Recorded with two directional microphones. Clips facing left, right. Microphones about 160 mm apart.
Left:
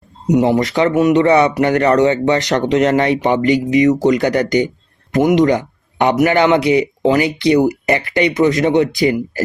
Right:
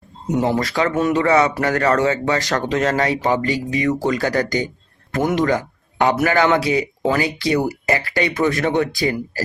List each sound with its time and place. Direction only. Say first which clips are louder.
0.3 s speech: left 6 dB; 20° left (ahead or behind)